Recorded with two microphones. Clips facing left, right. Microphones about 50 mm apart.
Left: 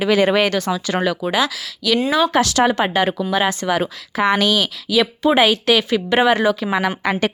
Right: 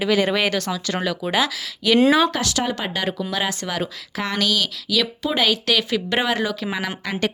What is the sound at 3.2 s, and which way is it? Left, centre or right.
Speech, centre.